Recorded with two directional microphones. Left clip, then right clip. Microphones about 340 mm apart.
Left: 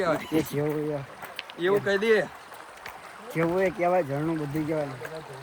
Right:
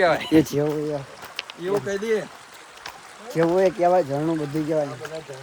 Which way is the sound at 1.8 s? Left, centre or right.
Left.